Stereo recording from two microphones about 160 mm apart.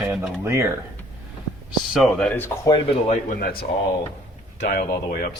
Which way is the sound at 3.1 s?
65° left (ahead or behind).